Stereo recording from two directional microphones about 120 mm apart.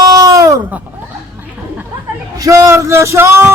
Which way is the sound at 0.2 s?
30° right (ahead or behind).